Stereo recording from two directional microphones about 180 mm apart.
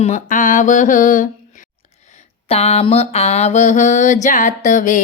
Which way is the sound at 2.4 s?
35° left (ahead or behind).